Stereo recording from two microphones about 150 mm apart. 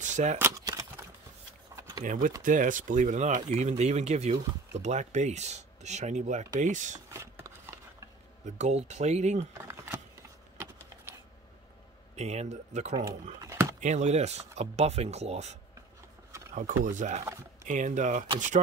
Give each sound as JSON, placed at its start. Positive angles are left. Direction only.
{"t": 0.0, "sound": "speech", "side_deg": -55}
{"t": 0.4, "sound": "keys jangling", "side_deg": -20}
{"t": 1.8, "sound": "a sound", "side_deg": -25}
{"t": 2.0, "sound": "speech", "side_deg": -60}
{"t": 7.2, "sound": "a sound", "side_deg": -15}
{"t": 8.5, "sound": "speech", "side_deg": -50}
{"t": 12.2, "sound": "speech", "side_deg": -45}
{"t": 13.4, "sound": "a sound", "side_deg": -20}
{"t": 13.7, "sound": "speech", "side_deg": -50}
{"t": 16.5, "sound": "speech", "side_deg": -55}